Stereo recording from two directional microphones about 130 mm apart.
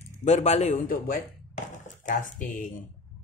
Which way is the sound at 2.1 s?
90° left.